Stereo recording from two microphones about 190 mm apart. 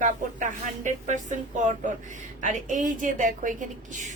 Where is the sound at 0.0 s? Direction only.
45° right (ahead or behind).